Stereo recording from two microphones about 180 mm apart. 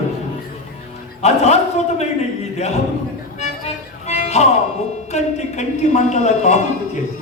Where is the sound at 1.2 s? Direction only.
35° left (ahead or behind).